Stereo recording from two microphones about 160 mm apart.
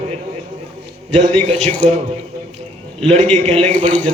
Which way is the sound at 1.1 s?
40° right (ahead or behind).